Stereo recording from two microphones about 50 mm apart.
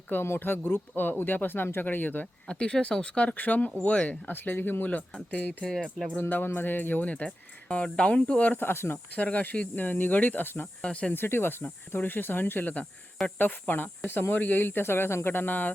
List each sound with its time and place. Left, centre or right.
0.1 s speech: left
2.5 s speech: centre
3.3 s speech: left
4.3 s speech: left
7.1 s speech: left
8.5 s speech: left
9.1 s speech: left
10.8 s speech: centre
11.1 s speech: left